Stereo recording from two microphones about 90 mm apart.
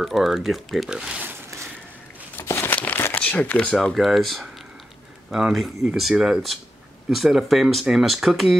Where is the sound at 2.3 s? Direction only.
30° left (ahead or behind).